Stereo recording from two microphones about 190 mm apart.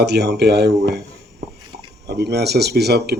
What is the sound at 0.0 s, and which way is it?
A man's voice, 60° right (ahead or behind).